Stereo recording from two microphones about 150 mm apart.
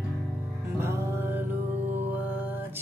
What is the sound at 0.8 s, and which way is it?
Music, 15° right (ahead or behind).